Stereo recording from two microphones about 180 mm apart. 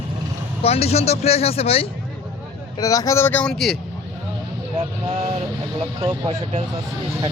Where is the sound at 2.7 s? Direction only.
20° left (ahead or behind); by 3.8 s centre (ahead or behind).